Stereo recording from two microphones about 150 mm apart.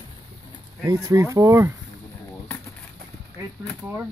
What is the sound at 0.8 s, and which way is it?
Speech, 20° right (ahead or behind).